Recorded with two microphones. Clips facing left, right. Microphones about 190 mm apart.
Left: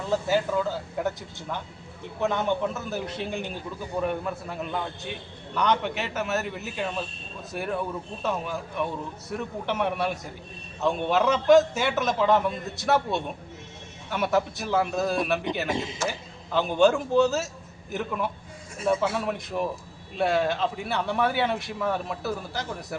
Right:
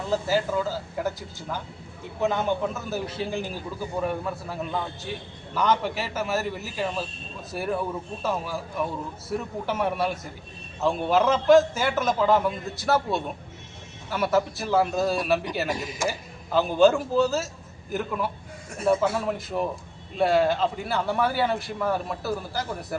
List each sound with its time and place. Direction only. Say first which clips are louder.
0.1 s a man's voice: even; 5° right (ahead or behind)
2.3 s a man's voice: even; centre (ahead or behind)
15.7 s speech: left 1 dB; 25° left (ahead or behind)
16.0 s a man's voice: right 2 dB; 10° right (ahead or behind)